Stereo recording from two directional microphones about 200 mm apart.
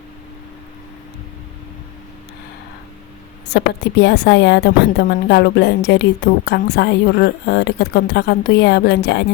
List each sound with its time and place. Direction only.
3.5 s a woman's voice: 55° left (ahead or behind)